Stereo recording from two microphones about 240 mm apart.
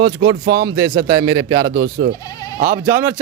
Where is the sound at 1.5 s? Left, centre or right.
Right.